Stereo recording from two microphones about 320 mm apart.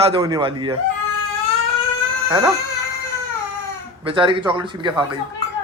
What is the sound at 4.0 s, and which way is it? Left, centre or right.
A man's voice, centre.